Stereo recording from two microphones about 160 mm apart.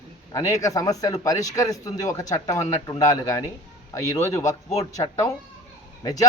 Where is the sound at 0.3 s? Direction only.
20° left (ahead or behind).